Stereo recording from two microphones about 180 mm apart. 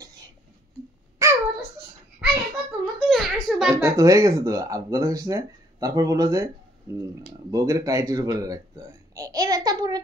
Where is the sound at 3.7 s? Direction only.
15° right (ahead or behind).